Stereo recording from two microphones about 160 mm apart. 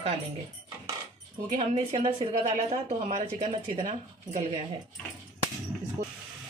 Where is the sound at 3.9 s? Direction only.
50° right (ahead or behind).